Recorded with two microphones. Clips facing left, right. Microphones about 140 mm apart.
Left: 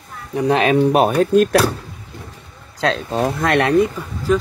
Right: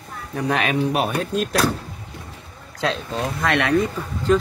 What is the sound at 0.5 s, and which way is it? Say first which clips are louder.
Speech: left 7 dB; 30° left (ahead or behind).